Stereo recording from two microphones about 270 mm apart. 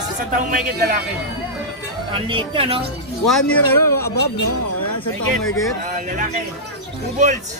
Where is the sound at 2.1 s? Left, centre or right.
Centre.